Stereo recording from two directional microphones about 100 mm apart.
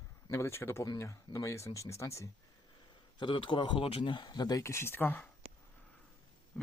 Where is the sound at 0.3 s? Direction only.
30° left (ahead or behind).